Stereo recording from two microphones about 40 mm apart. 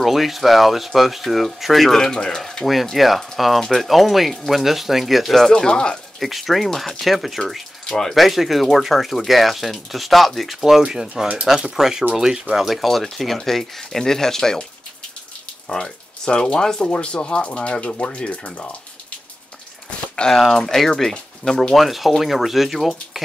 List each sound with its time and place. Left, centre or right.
0.0 s speech: centre
2.0 s speech: centre
2.4 s speech: centre
5.5 s speech: left
6.1 s speech: centre
7.8 s a sound: centre
8.1 s speech: centre
12.6 s speech: centre
15.7 s speech: centre
16.9 s speech: left
20.3 s speech: centre
21.7 s speech: centre